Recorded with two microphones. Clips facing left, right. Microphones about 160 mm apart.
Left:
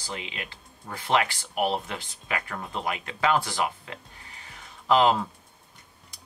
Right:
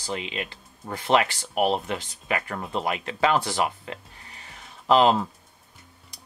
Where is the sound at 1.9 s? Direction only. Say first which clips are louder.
Right 5 dB; 30° right (ahead or behind).